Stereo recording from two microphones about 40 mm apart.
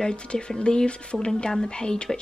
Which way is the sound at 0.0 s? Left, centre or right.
Left.